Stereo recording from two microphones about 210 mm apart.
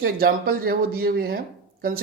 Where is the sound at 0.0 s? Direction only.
45° right (ahead or behind).